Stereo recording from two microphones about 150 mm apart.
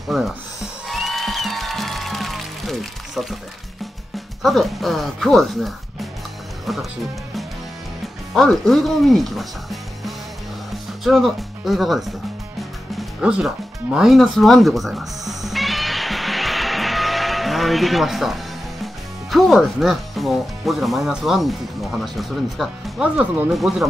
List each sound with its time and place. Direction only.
0.1 s music: centre (ahead or behind)
4.4 s speech: centre (ahead or behind)
8.3 s speech: centre (ahead or behind)
12.9 s music: 5° right (ahead or behind)
19.3 s speech: centre (ahead or behind)